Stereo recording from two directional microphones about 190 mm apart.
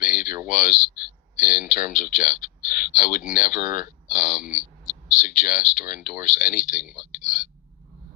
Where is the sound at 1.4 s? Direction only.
45° left (ahead or behind).